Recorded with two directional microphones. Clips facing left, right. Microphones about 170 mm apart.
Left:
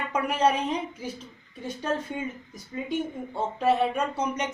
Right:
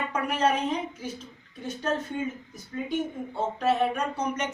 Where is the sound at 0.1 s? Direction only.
10° left (ahead or behind).